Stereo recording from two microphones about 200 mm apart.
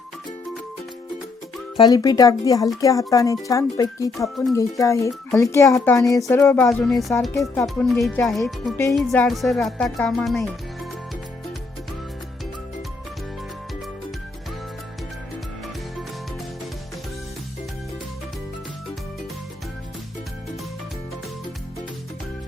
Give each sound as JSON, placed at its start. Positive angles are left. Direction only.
{"t": 1.7, "sound": "speech", "side_deg": 20}
{"t": 7.3, "sound": "music", "side_deg": 10}